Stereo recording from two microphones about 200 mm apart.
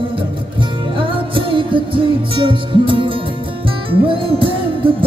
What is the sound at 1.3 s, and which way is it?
Music, 25° right (ahead or behind).